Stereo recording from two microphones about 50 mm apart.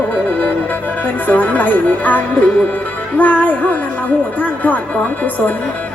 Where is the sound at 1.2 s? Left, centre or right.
Left.